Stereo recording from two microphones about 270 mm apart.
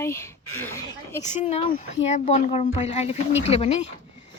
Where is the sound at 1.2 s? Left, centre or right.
Left.